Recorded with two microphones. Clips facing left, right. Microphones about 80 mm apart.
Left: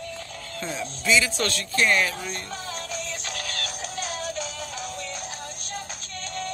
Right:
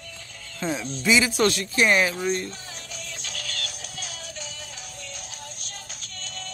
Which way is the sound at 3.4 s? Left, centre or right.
Left.